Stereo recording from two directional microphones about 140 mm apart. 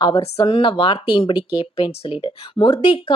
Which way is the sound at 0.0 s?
35° left (ahead or behind).